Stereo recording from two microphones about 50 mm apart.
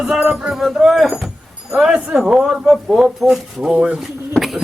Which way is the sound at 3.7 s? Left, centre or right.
Centre.